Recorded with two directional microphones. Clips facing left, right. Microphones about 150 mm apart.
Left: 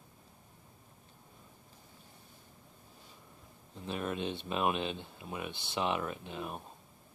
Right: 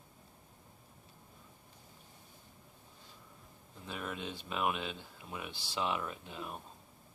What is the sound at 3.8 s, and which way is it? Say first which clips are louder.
Speech: left 6 dB; 25° left (ahead or behind).